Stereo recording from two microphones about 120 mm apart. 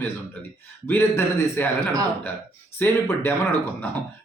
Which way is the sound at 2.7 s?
20° left (ahead or behind).